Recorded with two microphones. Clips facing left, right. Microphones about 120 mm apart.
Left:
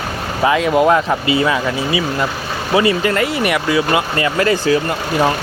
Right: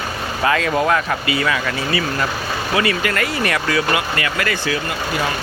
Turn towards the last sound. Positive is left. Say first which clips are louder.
# left 7 dB
turn(degrees=30)  # may be behind; listen again after turning